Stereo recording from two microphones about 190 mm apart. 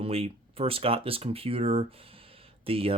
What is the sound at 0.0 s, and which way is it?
Speech, 30° right (ahead or behind).